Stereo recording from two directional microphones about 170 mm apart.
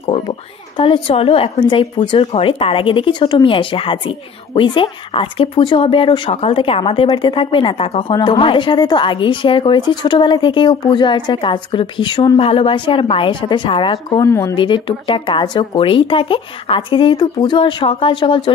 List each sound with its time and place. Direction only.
0.0 s a woman's voice: 30° left (ahead or behind)